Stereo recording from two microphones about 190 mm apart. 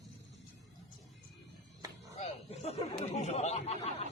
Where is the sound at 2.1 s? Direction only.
35° left (ahead or behind).